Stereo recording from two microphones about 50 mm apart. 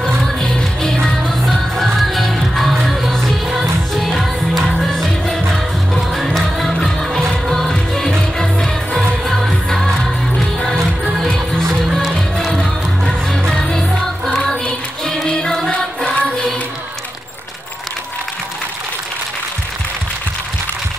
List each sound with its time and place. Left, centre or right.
0.2 s music: centre
11.2 s music: centre